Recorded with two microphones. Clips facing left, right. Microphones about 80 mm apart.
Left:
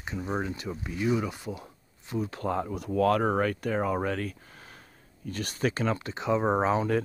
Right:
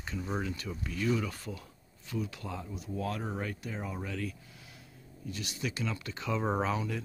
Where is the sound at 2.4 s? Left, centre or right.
Left.